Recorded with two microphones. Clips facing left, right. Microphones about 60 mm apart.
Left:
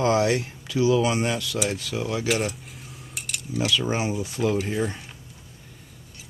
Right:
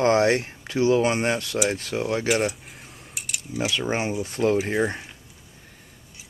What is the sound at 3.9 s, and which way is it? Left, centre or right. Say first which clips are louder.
Speech: right 1 dB; right.